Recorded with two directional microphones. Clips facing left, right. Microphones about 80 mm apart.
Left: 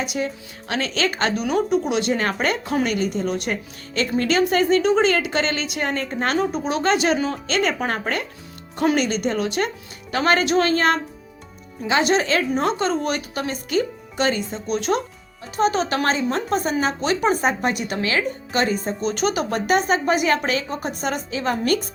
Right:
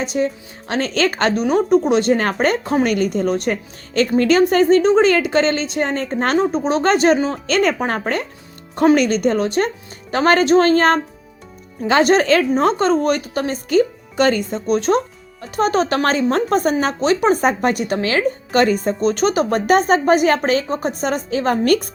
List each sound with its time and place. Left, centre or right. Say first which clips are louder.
0.0 s speech: right 5 dB; right
2.9 s a woman's voice: right 5 dB; right